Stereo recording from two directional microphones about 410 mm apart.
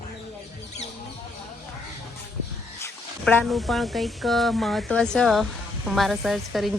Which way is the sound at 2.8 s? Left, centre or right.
Centre.